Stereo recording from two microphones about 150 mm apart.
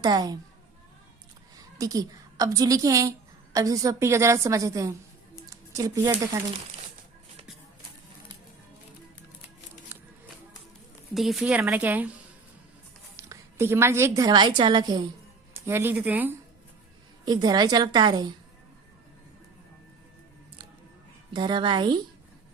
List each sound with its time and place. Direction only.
0.0 s a woman's voice: 30° right (ahead or behind)
1.5 s a woman's voice: 25° right (ahead or behind)
5.5 s a sound: 20° right (ahead or behind)
11.1 s a woman's voice: centre (ahead or behind)
13.1 s a woman's voice: 20° right (ahead or behind)
15.5 s a woman's voice: 15° right (ahead or behind)
17.2 s a woman's voice: 25° right (ahead or behind)
21.3 s a woman's voice: 30° right (ahead or behind)